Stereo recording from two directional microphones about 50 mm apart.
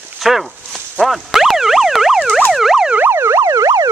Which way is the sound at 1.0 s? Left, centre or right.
Centre.